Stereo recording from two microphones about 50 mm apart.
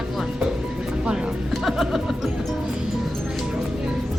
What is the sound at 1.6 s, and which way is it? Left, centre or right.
Music, centre.